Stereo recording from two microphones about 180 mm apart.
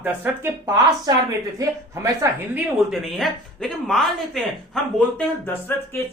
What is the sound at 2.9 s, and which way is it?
Speech, centre (ahead or behind).